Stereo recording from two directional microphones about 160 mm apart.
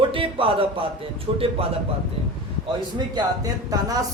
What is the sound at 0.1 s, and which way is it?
Speech, 35° right (ahead or behind).